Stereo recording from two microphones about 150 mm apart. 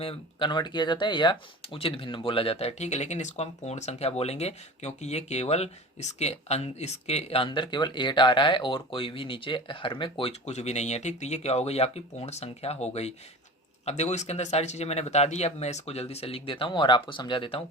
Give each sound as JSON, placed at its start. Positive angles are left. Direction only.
{"t": 0.0, "sound": "speech", "side_deg": 35}